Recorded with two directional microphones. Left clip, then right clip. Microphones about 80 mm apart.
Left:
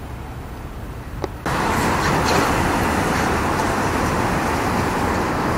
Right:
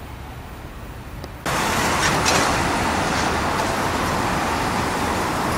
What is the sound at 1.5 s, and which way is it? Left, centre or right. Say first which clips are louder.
Vehicle: even; centre.